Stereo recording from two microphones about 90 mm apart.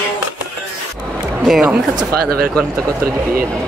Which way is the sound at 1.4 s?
5° right (ahead or behind).